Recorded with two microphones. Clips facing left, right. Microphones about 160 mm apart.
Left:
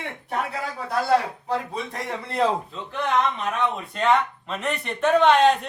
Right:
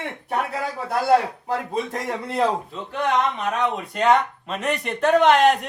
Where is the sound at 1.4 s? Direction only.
45° right (ahead or behind).